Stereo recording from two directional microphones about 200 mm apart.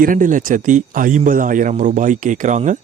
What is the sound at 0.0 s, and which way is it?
Speech, 40° right (ahead or behind).